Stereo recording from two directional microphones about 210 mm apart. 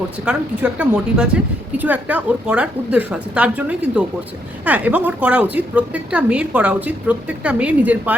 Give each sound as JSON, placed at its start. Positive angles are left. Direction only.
{"t": 0.3, "sound": "a woman's voice", "side_deg": -5}